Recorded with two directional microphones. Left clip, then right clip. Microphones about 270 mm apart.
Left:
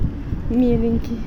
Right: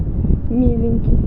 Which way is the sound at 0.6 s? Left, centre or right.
Centre.